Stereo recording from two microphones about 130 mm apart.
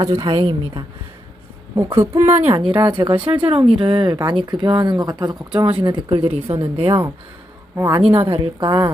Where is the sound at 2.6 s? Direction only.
40° right (ahead or behind).